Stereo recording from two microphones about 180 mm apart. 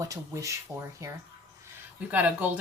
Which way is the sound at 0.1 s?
15° right (ahead or behind).